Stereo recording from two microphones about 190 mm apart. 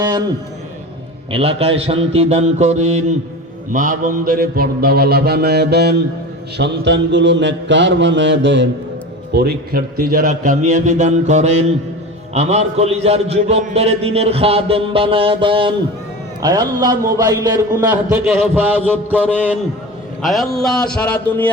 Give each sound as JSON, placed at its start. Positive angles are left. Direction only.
{"t": 1.3, "sound": "a man's voice", "side_deg": -30}
{"t": 3.7, "sound": "mantra", "side_deg": -45}
{"t": 9.3, "sound": "a man's voice", "side_deg": -55}
{"t": 16.4, "sound": "a sound", "side_deg": -20}
{"t": 20.2, "sound": "speech", "side_deg": 0}